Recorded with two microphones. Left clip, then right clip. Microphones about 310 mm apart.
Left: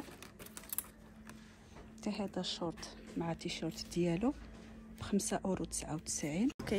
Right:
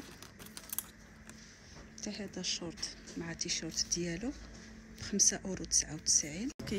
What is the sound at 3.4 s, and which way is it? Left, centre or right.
Speech, centre.